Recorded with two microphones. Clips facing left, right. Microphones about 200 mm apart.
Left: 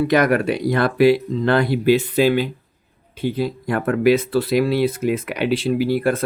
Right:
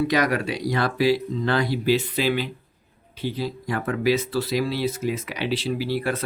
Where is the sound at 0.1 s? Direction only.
55° left (ahead or behind).